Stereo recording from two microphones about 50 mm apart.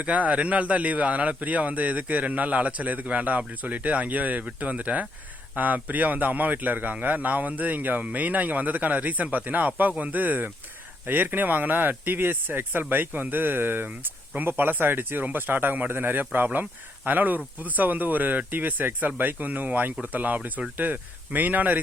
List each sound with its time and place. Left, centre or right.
0.0 s a man's voice: right